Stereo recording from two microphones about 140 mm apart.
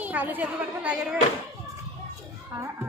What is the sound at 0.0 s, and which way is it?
Speech, 10° right (ahead or behind).